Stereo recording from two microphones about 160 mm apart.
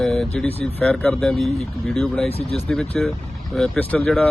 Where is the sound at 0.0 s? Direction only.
5° left (ahead or behind).